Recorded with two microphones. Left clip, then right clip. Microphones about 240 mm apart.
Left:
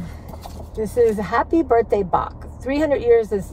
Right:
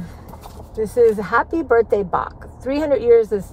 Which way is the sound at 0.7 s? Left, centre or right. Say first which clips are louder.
Right 3 dB; centre.